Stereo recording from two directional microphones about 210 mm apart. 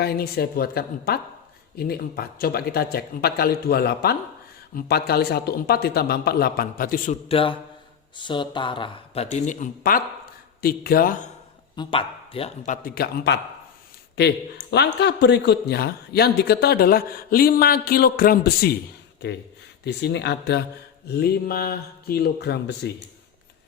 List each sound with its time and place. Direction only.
0.0 s a man's voice: 45° left (ahead or behind)
7.3 s a man's voice: 25° left (ahead or behind); by 11.3 s 40° left (ahead or behind)
11.8 s a man's voice: 25° left (ahead or behind); by 18.7 s 45° left (ahead or behind)
19.8 s a man's voice: 55° left (ahead or behind)